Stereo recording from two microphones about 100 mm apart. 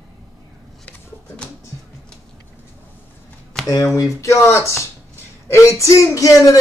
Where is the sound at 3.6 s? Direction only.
5° left (ahead or behind).